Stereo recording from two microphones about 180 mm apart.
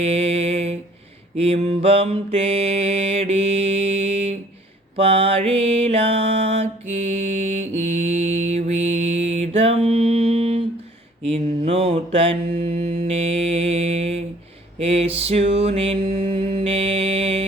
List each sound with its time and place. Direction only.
0.0 s mantra: 35° right (ahead or behind)
8.0 s mantra: 35° right (ahead or behind)